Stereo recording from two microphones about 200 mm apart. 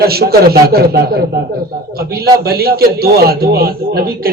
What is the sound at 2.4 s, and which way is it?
A man's voice, 50° right (ahead or behind).